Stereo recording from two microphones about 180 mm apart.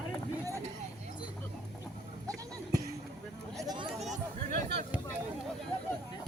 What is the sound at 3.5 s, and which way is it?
Hubbub, 20° right (ahead or behind).